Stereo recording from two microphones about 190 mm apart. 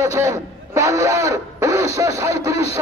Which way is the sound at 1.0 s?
15° right (ahead or behind).